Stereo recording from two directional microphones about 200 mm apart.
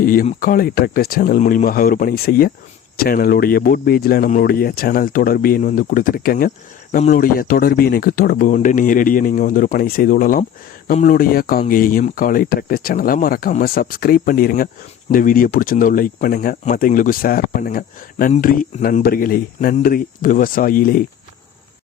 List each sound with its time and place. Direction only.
0.0 s speech: 45° left (ahead or behind)